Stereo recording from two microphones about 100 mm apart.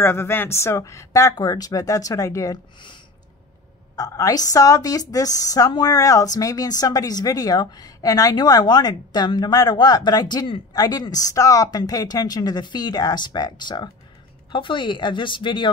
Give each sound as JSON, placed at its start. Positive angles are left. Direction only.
{"t": 0.0, "sound": "a woman's voice", "side_deg": 25}
{"t": 3.9, "sound": "a woman's voice", "side_deg": 35}
{"t": 14.5, "sound": "speech", "side_deg": 55}